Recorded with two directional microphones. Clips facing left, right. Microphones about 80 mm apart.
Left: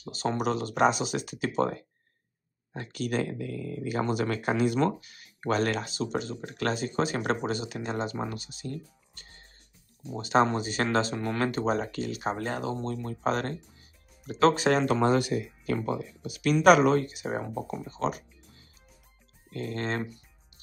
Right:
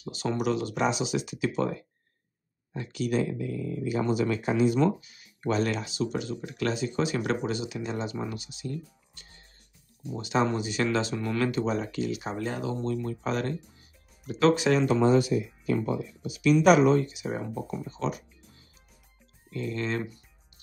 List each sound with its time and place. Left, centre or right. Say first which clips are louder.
0.0 s speech: even; left
19.5 s speech: right 1 dB; left